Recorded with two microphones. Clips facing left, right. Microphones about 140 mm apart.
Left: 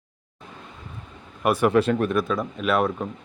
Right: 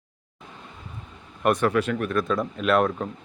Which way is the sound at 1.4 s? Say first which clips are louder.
Left 1 dB; 5° left (ahead or behind).